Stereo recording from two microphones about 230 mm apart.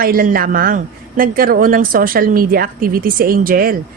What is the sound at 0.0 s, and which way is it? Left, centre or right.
A woman's voice, right.